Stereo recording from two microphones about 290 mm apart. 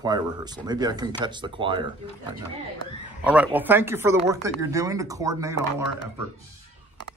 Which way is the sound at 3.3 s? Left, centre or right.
Centre.